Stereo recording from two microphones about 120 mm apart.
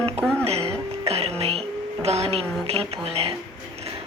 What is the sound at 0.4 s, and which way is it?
Music, 60° right (ahead or behind).